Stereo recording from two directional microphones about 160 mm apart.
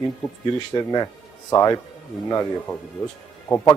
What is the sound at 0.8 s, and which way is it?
Speech, 25° left (ahead or behind).